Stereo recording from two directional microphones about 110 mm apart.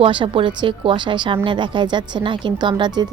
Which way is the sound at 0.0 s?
50° right (ahead or behind).